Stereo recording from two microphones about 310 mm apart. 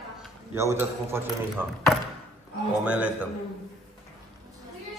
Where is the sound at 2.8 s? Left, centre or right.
Centre.